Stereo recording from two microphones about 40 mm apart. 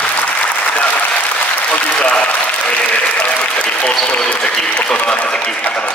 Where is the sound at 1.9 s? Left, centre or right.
Left.